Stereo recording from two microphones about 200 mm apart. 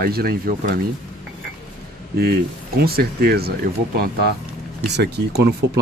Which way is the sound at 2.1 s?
50° right (ahead or behind).